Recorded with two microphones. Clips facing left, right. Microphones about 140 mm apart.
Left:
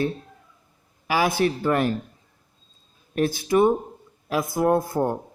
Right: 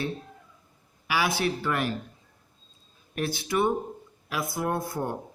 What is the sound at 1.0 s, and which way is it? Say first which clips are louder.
Speech: left 5 dB; 45° left (ahead or behind).